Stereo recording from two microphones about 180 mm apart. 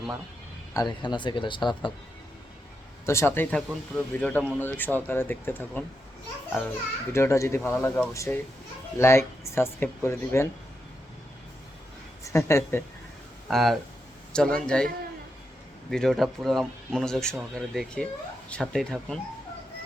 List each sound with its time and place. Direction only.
0.7 s speech: 20° left (ahead or behind)
3.1 s speech: 15° left (ahead or behind)
7.1 s speech: 15° left (ahead or behind)
12.2 s speech: 15° left (ahead or behind)
13.5 s speech: centre (ahead or behind)
15.9 s speech: centre (ahead or behind)